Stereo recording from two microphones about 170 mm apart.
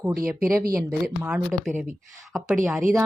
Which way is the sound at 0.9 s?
10° right (ahead or behind).